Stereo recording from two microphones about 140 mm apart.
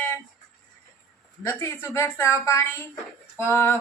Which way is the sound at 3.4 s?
15° left (ahead or behind).